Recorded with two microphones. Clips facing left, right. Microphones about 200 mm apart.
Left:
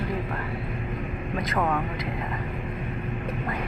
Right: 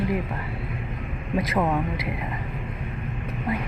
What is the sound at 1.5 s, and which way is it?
Speech, 15° right (ahead or behind).